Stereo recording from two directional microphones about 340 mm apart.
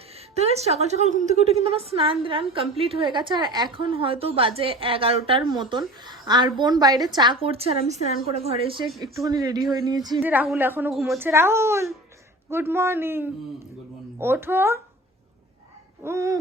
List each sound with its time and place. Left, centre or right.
0.3 s a woman's voice: centre
16.0 s a woman's voice: centre